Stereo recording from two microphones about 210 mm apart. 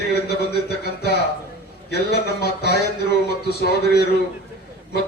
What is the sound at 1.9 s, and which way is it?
Speech, 50° left (ahead or behind).